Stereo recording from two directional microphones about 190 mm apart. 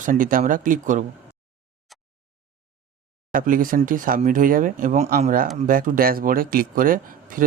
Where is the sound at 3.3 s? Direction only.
45° right (ahead or behind).